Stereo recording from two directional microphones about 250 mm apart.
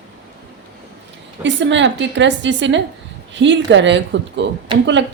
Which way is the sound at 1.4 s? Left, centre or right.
Right.